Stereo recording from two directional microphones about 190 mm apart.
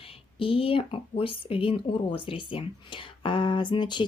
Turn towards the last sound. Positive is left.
turn(degrees=25)  # may be behind; listen again after turning